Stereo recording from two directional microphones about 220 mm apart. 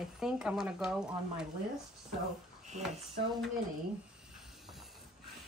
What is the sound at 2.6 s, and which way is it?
Speech, 30° right (ahead or behind).